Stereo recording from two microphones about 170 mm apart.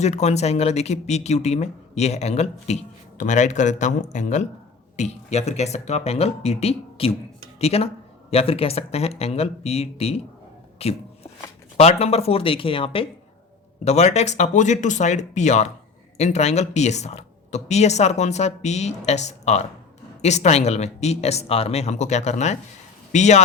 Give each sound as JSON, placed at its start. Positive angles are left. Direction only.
{"t": 0.0, "sound": "speech", "side_deg": 40}